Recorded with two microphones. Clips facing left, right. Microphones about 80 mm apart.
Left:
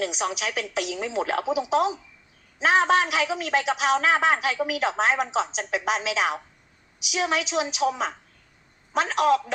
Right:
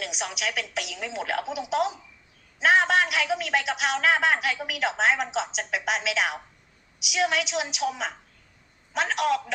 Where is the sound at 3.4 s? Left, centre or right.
Left.